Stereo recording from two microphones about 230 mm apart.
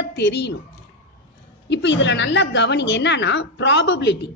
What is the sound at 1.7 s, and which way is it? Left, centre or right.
A woman's voice, left.